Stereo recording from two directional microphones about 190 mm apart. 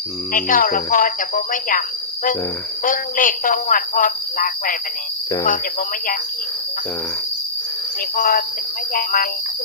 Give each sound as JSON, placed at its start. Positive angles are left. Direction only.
{"t": 0.3, "sound": "speech", "side_deg": 45}
{"t": 2.8, "sound": "speech", "side_deg": 45}
{"t": 8.1, "sound": "speech", "side_deg": 50}